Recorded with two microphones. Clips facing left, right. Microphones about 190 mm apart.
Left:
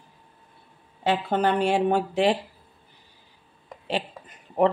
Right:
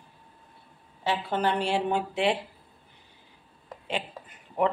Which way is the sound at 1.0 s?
55° left (ahead or behind).